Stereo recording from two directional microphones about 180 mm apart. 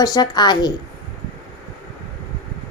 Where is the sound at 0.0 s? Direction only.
25° left (ahead or behind).